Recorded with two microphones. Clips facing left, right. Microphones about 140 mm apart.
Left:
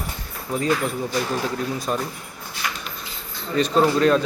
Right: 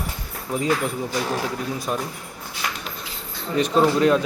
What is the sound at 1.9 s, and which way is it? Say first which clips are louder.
Speech: left 1 dB; 10° right (ahead or behind).